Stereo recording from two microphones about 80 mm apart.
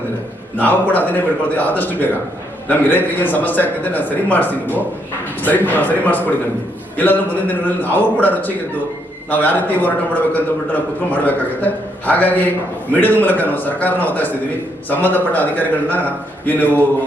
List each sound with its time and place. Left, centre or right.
0.5 s a man's voice: left